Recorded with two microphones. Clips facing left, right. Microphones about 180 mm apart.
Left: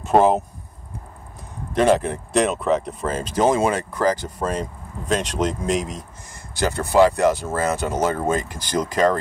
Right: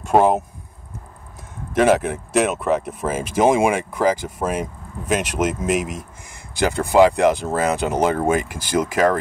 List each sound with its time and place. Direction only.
0.0 s speech: centre (ahead or behind)
1.8 s speech: 5° right (ahead or behind)